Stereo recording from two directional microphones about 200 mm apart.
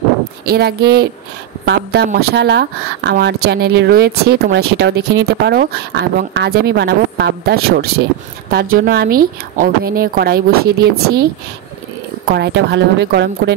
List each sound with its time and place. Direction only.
0.5 s a woman's voice: 50° right (ahead or behind)
12.4 s speech: 60° right (ahead or behind)